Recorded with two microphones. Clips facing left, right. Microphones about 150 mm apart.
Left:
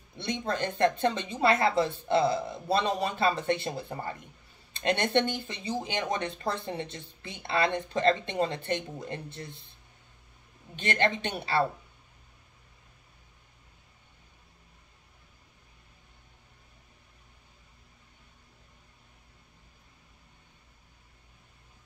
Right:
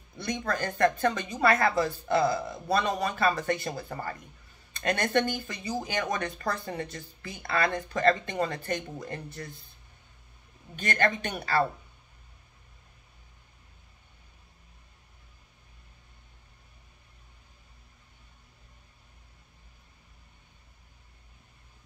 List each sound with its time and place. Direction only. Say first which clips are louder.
0.5 s a woman's voice: even; 25° left (ahead or behind)
10.8 s a woman's voice: even; 25° left (ahead or behind)